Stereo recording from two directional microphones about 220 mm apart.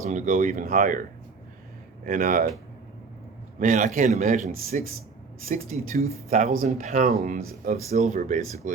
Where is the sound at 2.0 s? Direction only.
40° right (ahead or behind).